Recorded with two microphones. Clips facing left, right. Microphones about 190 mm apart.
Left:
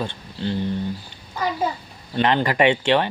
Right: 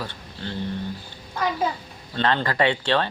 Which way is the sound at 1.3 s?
Centre (ahead or behind).